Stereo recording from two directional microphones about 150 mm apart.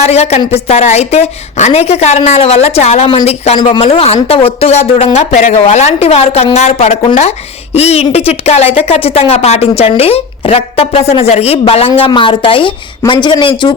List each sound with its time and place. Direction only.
0.0 s a woman's voice: 45° left (ahead or behind)